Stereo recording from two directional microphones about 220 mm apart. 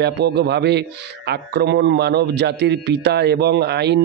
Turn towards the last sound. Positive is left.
turn(degrees=-50)  # may be behind; listen again after turning